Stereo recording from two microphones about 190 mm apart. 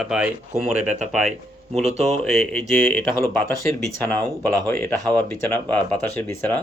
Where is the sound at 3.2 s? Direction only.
15° left (ahead or behind).